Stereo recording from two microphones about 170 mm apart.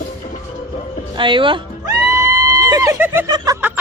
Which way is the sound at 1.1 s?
30° right (ahead or behind).